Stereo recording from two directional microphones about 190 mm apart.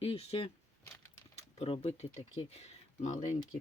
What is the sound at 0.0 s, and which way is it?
Speech, 30° left (ahead or behind).